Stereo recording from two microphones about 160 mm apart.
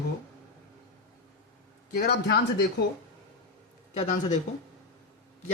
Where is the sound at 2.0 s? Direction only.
80° left.